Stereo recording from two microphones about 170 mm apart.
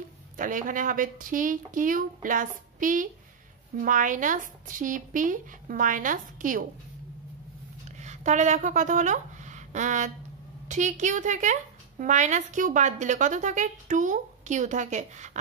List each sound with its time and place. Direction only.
0.4 s a woman's voice: 50° right (ahead or behind)
8.0 s a woman's voice: 45° right (ahead or behind)